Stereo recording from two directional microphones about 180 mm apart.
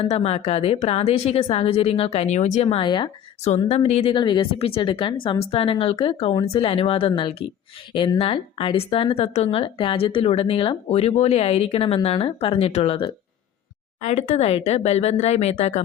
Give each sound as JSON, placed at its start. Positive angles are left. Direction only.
{"t": 0.0, "sound": "speech", "side_deg": 35}